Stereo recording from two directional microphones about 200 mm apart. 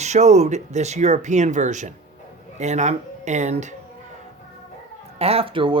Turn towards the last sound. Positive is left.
turn(degrees=-25)  # may be behind; listen again after turning